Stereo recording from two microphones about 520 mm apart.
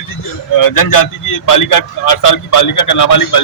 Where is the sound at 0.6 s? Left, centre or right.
Left.